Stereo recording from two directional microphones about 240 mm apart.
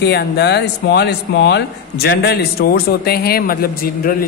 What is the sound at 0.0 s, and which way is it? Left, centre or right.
A man's voice, left.